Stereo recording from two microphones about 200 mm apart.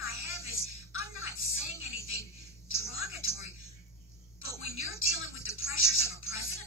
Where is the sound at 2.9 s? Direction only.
90° left.